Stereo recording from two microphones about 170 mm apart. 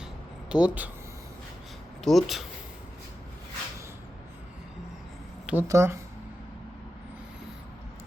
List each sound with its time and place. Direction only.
0.5 s speech: 5° right (ahead or behind)
2.0 s speech: centre (ahead or behind)
5.5 s speech: 15° right (ahead or behind)